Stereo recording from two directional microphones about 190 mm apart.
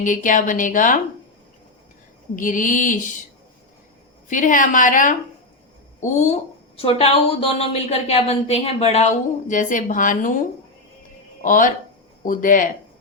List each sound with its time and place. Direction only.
0.0 s a woman's voice: 45° left (ahead or behind)
2.3 s a woman's voice: 45° left (ahead or behind)
4.3 s a woman's voice: 45° left (ahead or behind)
11.4 s a woman's voice: 45° left (ahead or behind)